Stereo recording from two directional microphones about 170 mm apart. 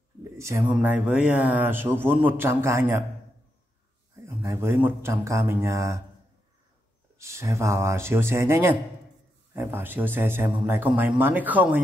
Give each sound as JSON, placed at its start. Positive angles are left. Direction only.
{"t": 0.2, "sound": "a sound", "side_deg": -15}
{"t": 0.7, "sound": "speech", "side_deg": -5}
{"t": 4.4, "sound": "speech", "side_deg": -15}
{"t": 7.2, "sound": "speech", "side_deg": -15}